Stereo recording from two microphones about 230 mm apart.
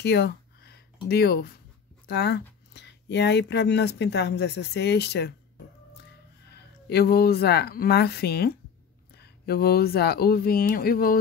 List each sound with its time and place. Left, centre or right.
0.0 s a sound: left
1.0 s speech: left
6.5 s speech: left